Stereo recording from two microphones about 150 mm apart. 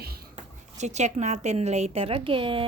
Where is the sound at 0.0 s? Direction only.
90° right.